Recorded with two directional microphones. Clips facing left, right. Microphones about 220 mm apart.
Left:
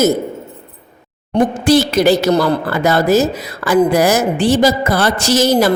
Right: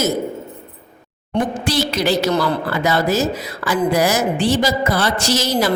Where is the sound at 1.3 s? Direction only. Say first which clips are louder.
Left 7 dB; 50° left (ahead or behind).